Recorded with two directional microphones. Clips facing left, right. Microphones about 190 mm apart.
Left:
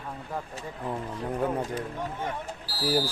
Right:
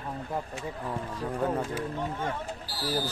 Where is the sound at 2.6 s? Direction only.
Centre (ahead or behind).